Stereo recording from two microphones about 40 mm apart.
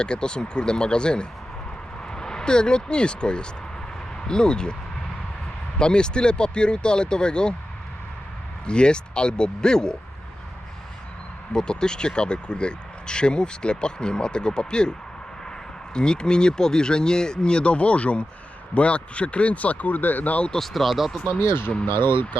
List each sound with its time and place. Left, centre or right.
0.0 s speech: left
5.8 s speech: left
8.6 s speech: left
11.5 s speech: centre
16.0 s speech: left
20.5 s speech: centre
21.3 s speech: left